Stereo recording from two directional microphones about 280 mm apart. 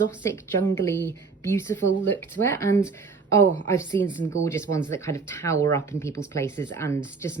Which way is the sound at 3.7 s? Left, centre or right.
Centre.